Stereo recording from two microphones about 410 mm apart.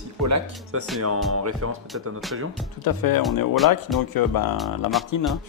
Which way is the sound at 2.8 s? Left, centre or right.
Left.